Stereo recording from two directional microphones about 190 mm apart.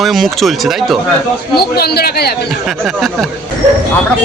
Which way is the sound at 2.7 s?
Centre (ahead or behind).